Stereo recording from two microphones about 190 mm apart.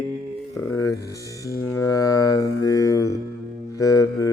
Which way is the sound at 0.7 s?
20° left (ahead or behind).